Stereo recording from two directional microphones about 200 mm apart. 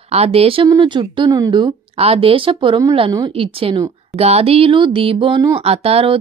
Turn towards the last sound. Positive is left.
turn(degrees=-30)  # may be behind; listen again after turning